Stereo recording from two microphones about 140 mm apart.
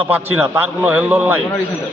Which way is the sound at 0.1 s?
15° right (ahead or behind).